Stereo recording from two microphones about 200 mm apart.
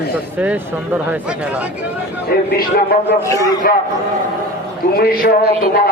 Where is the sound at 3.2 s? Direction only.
15° left (ahead or behind).